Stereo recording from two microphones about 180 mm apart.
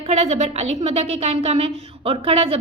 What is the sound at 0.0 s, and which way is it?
A woman's voice, 35° right (ahead or behind).